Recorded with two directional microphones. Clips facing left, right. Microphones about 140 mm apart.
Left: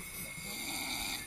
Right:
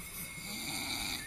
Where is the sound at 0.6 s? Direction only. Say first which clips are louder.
Even; 25° right (ahead or behind).